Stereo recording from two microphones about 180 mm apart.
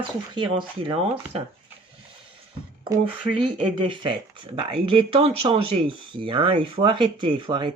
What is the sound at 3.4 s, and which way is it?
Speech, 25° right (ahead or behind).